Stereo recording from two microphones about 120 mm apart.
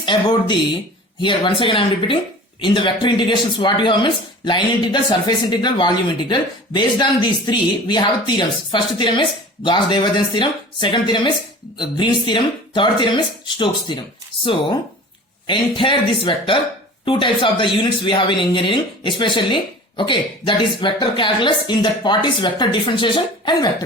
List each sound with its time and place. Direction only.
0.0 s speech: 40° left (ahead or behind)
15.4 s speech: 45° left (ahead or behind)